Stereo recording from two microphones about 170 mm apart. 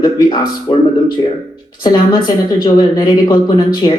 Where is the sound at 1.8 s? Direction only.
25° left (ahead or behind).